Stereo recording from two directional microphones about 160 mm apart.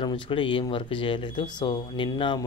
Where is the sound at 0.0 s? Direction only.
30° left (ahead or behind).